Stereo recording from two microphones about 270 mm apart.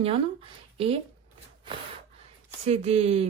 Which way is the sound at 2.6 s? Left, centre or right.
Right.